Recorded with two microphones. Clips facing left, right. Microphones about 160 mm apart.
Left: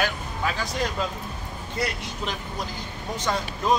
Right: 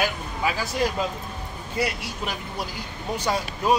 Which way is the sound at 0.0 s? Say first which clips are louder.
Right 1 dB; 10° right (ahead or behind).